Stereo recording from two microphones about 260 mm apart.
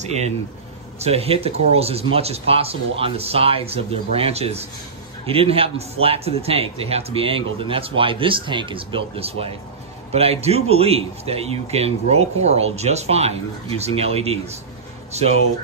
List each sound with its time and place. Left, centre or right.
0.0 s a man's voice: right